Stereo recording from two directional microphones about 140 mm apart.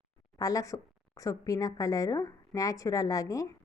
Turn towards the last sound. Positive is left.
turn(degrees=25)  # may be behind; listen again after turning